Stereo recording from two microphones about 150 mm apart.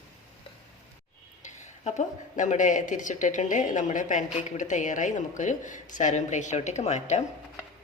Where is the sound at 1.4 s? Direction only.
50° left (ahead or behind).